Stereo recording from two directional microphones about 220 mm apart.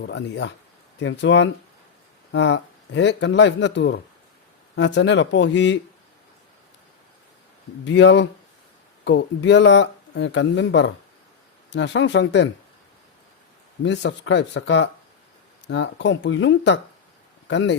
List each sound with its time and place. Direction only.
0.0 s speech: 50° left (ahead or behind)
7.9 s speech: 55° left (ahead or behind)
13.8 s speech: 50° left (ahead or behind)